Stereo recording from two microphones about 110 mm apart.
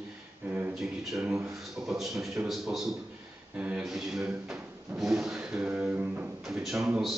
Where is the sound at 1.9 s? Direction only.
5° right (ahead or behind).